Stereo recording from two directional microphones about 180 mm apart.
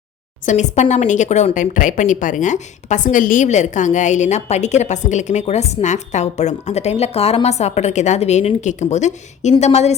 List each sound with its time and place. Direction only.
0.4 s speech: 40° left (ahead or behind)